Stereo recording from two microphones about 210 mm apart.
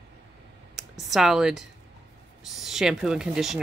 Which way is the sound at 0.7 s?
Centre (ahead or behind).